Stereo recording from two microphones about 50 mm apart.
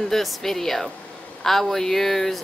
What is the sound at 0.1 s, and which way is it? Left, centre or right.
Speech, centre.